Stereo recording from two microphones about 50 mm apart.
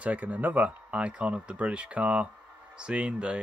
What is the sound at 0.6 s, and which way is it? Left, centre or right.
Speech, right.